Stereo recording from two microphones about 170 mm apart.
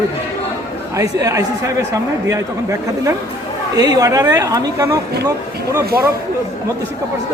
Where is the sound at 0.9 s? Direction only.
20° right (ahead or behind).